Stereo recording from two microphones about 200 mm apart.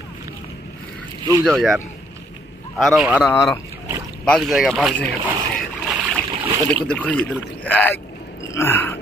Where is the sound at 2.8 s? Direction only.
5° right (ahead or behind).